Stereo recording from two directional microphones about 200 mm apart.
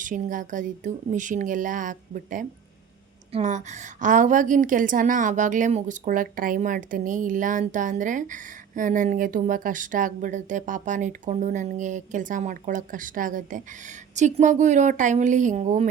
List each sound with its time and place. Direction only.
0.0 s a woman's voice: 40° right (ahead or behind)